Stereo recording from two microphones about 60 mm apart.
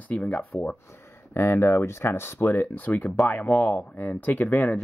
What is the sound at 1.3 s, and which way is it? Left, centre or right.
Speech, left.